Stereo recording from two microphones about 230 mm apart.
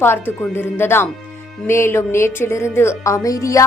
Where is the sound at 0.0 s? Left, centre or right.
Centre.